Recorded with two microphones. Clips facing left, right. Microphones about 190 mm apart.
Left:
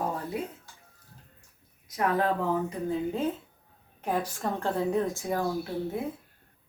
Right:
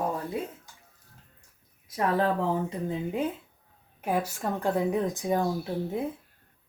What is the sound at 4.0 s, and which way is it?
A woman's voice, 10° right (ahead or behind).